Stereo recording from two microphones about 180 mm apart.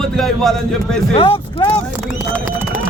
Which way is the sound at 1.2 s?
30° left (ahead or behind).